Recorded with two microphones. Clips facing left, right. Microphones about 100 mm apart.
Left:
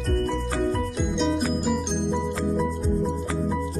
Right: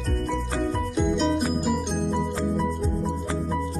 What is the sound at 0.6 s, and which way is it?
Music, centre (ahead or behind).